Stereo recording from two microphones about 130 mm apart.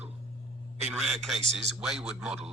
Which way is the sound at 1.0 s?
Centre (ahead or behind).